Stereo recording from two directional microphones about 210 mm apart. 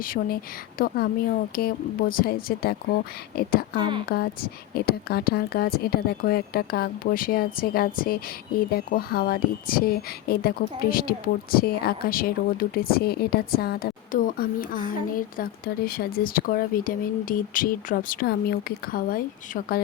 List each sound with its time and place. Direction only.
0.0 s speech: 45° left (ahead or behind)
3.8 s speech: 25° right (ahead or behind)
4.7 s speech: 45° left (ahead or behind)